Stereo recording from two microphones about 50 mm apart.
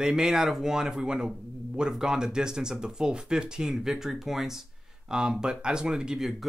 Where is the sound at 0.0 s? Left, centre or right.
Centre.